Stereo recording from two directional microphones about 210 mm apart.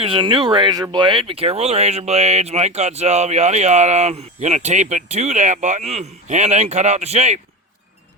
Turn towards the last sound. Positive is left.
turn(degrees=-30)  # may be behind; listen again after turning